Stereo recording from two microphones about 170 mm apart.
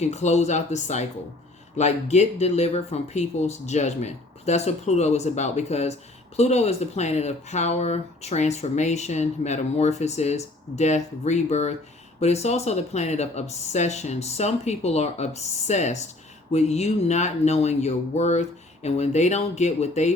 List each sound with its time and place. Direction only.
0.0 s speech: 40° left (ahead or behind)